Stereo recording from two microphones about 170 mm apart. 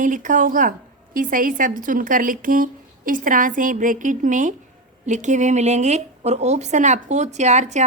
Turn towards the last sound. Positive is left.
turn(degrees=-45)  # may be behind; listen again after turning